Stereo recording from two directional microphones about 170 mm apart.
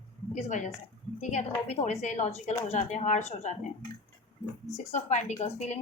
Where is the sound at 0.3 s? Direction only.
45° left (ahead or behind).